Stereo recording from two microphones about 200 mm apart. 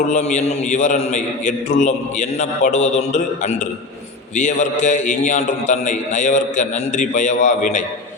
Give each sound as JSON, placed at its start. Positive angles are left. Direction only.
{"t": 0.1, "sound": "a man's voice", "side_deg": 35}